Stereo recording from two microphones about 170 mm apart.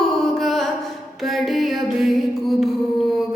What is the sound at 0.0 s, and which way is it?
Music, centre (ahead or behind).